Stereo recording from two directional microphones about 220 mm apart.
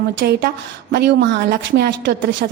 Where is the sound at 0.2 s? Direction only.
40° right (ahead or behind).